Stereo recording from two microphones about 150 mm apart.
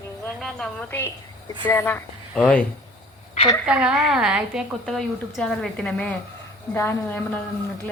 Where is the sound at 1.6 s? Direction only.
15° left (ahead or behind).